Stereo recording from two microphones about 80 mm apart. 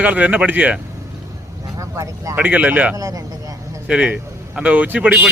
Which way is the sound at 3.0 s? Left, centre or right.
Right.